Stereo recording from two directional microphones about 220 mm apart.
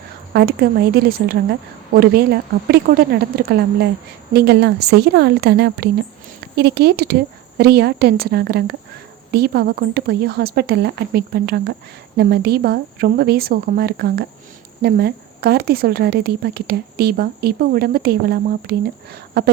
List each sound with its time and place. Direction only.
0.3 s a woman's voice: 45° right (ahead or behind)